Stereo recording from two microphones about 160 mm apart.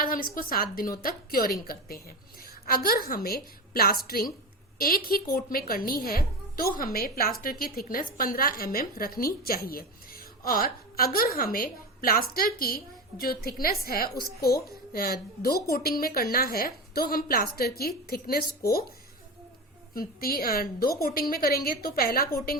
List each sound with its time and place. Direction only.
0.0 s a woman's voice: 65° left (ahead or behind)
19.9 s a woman's voice: 65° left (ahead or behind)